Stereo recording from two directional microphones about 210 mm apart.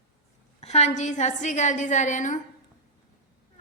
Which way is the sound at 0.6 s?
30° left (ahead or behind).